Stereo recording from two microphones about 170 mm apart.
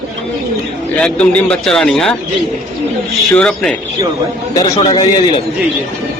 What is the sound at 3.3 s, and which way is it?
Speech, 5° left (ahead or behind).